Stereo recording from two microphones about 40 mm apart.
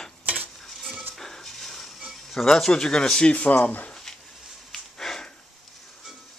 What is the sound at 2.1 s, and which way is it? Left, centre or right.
Speech, centre.